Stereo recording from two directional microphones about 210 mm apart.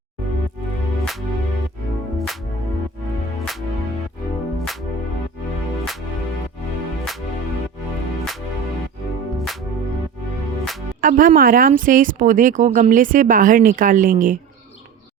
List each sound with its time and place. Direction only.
2.1 s music: centre (ahead or behind)
11.0 s speech: 40° right (ahead or behind)